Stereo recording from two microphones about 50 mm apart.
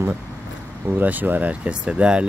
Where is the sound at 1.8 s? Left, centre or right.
Right.